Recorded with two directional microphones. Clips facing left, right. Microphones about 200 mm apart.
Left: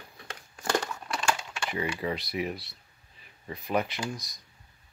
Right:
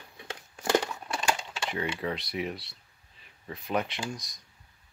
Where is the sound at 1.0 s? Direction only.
20° right (ahead or behind).